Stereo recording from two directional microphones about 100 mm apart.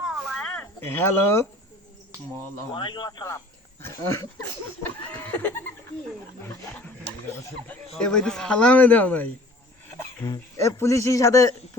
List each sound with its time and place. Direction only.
0.0 s a sound: centre (ahead or behind)
0.8 s speech: 25° left (ahead or behind)
2.7 s speech: 50° left (ahead or behind); by 5.6 s 20° left (ahead or behind)
7.9 s speech: 5° left (ahead or behind)
10.6 s speech: 30° left (ahead or behind)